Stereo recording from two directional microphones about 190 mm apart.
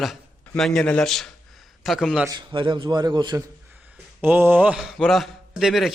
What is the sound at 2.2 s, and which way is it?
A man's voice, 25° right (ahead or behind).